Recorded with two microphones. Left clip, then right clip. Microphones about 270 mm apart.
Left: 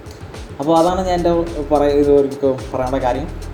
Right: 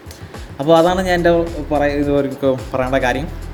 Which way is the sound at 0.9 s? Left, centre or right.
Right.